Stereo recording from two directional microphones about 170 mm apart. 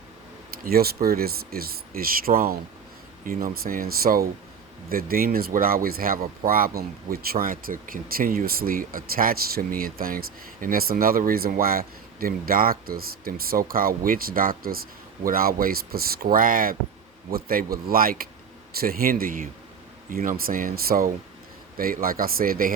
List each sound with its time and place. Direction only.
0.6 s speech: 65° right (ahead or behind)